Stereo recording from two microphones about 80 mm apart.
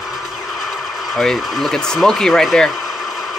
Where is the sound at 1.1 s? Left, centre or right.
Centre.